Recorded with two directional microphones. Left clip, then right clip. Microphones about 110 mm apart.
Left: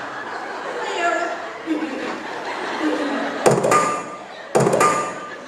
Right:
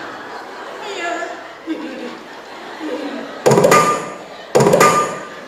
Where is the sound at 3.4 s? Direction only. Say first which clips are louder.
Right 5 dB; 50° left (ahead or behind).